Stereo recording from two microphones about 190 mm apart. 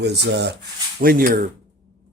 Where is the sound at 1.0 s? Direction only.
50° right (ahead or behind).